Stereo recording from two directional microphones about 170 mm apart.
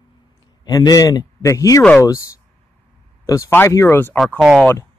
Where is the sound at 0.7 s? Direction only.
20° left (ahead or behind).